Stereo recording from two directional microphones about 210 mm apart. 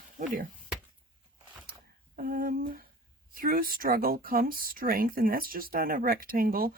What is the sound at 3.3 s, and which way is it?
Speech, 45° right (ahead or behind).